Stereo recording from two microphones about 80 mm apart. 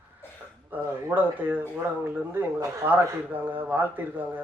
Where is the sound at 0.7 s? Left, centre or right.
Right.